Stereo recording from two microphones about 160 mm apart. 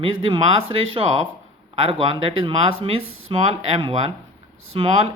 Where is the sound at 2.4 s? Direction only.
35° right (ahead or behind).